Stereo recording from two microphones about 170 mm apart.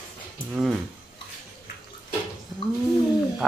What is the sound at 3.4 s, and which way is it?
Speech, centre (ahead or behind).